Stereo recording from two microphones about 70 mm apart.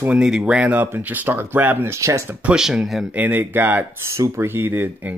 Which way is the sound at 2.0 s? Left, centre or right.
Right.